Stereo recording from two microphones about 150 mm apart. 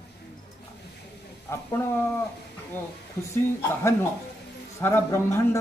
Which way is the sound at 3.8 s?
15° left (ahead or behind).